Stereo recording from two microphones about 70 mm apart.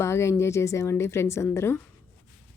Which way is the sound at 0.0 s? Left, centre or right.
Left.